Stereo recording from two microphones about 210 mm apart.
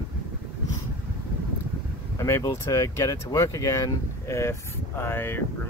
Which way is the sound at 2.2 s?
15° left (ahead or behind).